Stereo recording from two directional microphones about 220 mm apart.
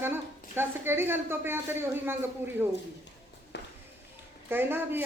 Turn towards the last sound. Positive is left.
turn(degrees=-10)  # may be behind; listen again after turning